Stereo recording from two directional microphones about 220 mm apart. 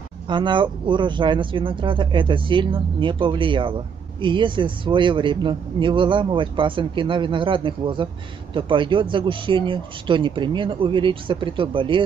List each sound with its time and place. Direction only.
0.3 s a man's voice: 20° right (ahead or behind)